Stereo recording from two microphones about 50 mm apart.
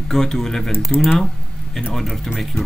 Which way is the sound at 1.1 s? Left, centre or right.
Centre.